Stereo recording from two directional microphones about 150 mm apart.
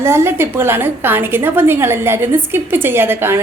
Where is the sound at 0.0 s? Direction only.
15° right (ahead or behind).